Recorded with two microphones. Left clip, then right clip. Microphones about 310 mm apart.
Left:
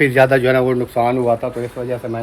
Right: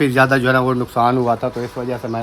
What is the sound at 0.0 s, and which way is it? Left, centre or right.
Speech, centre.